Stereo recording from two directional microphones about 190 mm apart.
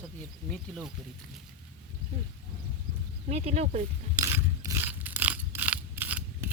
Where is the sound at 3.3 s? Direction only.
35° right (ahead or behind).